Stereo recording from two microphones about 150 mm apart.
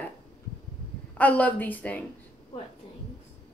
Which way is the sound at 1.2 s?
10° left (ahead or behind).